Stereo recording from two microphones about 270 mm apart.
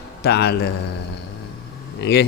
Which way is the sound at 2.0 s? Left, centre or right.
Left.